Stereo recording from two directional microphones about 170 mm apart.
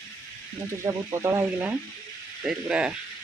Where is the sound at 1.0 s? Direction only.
15° right (ahead or behind).